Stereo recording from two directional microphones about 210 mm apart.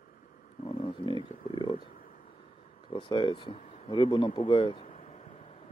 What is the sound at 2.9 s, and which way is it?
Speech, 25° left (ahead or behind).